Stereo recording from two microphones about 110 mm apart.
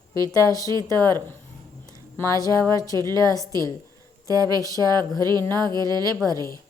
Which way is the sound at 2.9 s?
35° right (ahead or behind).